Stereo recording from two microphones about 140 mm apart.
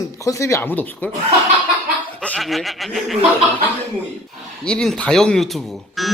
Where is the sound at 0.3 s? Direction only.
20° left (ahead or behind).